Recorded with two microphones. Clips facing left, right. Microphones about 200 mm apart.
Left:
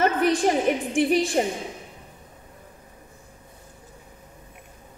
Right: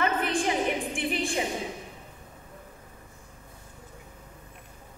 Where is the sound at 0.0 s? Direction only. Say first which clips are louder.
Left 6 dB; 40° left (ahead or behind).